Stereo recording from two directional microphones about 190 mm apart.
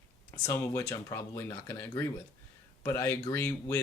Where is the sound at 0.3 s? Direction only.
15° left (ahead or behind).